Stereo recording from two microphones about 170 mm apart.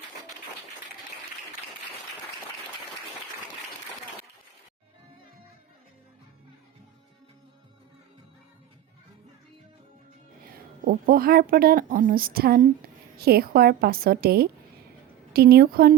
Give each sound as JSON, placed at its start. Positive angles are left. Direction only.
{"t": 10.4, "sound": "speech", "side_deg": -55}